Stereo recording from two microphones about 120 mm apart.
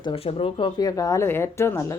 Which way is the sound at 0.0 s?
50° left (ahead or behind).